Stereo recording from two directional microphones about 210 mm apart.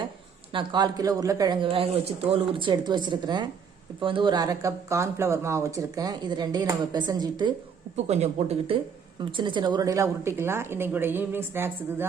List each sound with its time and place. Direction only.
0.5 s speech: 20° right (ahead or behind)
7.9 s a woman's voice: 30° right (ahead or behind); by 12.0 s 10° right (ahead or behind)